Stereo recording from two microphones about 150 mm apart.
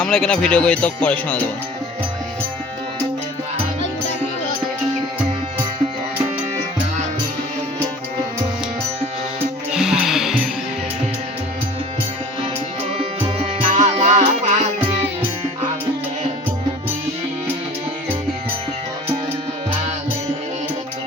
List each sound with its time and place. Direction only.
0.0 s speech: 5° left (ahead or behind)
9.7 s music: 5° right (ahead or behind)
13.0 s music: 40° right (ahead or behind)